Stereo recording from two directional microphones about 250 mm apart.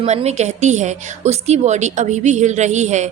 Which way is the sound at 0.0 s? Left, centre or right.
Right.